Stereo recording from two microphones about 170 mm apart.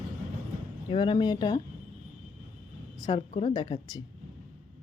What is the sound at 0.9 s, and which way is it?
Speech, 30° left (ahead or behind).